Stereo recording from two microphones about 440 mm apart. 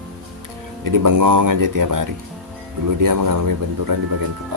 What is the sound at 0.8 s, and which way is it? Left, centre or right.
Speech, right.